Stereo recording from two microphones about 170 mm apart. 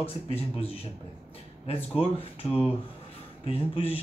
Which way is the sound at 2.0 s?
35° left (ahead or behind).